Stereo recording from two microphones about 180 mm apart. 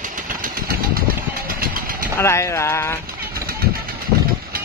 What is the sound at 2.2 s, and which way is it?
Speech, 15° left (ahead or behind).